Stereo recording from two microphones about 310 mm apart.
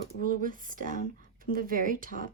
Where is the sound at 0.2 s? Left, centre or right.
Right.